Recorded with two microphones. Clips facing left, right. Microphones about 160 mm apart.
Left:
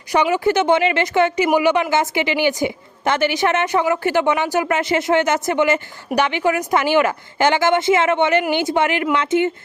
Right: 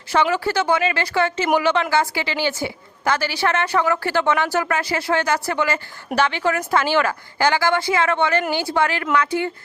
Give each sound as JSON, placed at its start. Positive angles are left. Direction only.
{"t": 0.1, "sound": "a woman's voice", "side_deg": 15}